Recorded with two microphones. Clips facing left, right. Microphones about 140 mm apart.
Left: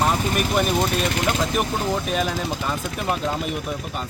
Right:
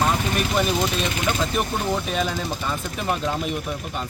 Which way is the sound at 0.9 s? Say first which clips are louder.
Left 2 dB; 55° left (ahead or behind).